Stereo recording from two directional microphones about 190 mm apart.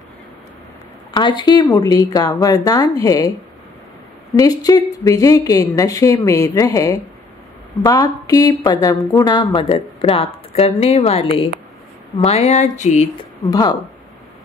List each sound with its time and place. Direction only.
1.1 s a woman's voice: 25° left (ahead or behind)
4.4 s a woman's voice: 20° left (ahead or behind); by 13.1 s 40° left (ahead or behind)
13.5 s a woman's voice: 20° left (ahead or behind)